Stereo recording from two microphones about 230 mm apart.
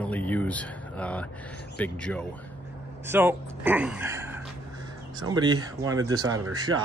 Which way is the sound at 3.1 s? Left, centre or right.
Centre.